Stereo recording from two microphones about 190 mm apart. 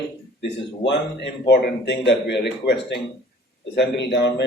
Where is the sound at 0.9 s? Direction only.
65° left (ahead or behind).